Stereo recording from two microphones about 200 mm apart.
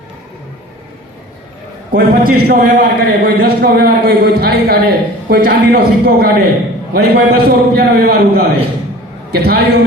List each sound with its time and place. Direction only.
1.9 s a man's voice: 50° right (ahead or behind)